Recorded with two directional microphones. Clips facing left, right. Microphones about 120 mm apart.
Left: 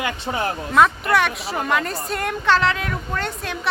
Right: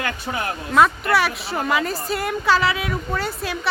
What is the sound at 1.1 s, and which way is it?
Speech, centre (ahead or behind).